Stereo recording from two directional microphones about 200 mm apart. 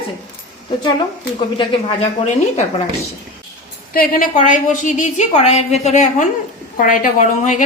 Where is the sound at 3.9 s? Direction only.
45° left (ahead or behind).